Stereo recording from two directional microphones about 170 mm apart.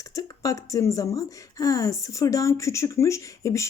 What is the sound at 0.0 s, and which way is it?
Speech, 20° left (ahead or behind).